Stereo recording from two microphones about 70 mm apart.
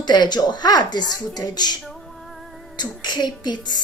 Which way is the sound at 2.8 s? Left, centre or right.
Left.